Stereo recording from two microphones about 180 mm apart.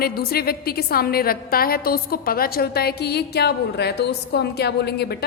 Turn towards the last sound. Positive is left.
turn(degrees=65)  # may be behind; listen again after turning